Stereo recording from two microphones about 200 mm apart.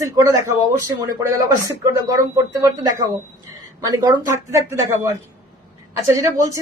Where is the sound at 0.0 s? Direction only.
15° right (ahead or behind).